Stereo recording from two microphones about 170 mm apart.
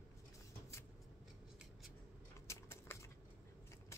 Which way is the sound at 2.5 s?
15° left (ahead or behind).